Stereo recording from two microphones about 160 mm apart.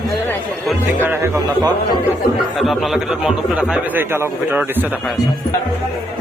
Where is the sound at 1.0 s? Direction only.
15° right (ahead or behind).